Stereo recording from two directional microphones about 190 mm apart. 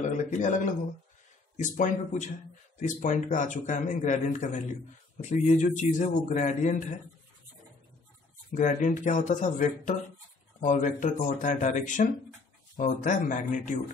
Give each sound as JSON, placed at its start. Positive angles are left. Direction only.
{"t": 0.0, "sound": "a sound", "side_deg": 40}
{"t": 1.6, "sound": "a man's voice", "side_deg": 40}
{"t": 8.5, "sound": "a man's voice", "side_deg": 40}